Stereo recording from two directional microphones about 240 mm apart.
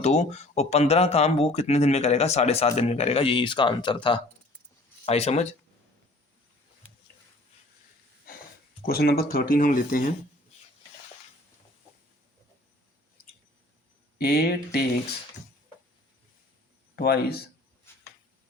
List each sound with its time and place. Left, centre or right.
0.0 s speech: left
8.8 s speech: left
14.2 s speech: left
16.9 s speech: left
17.9 s a sound: centre